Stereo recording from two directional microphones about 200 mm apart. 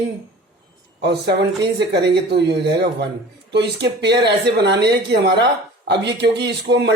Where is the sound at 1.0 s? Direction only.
60° right (ahead or behind).